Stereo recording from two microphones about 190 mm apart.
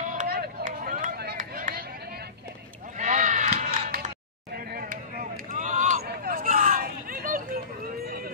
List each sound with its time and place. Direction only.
0.1 s run: 50° right (ahead or behind)
3.0 s a sound: 40° right (ahead or behind)
5.5 s run: 45° right (ahead or behind)
6.0 s hubbub: 50° right (ahead or behind)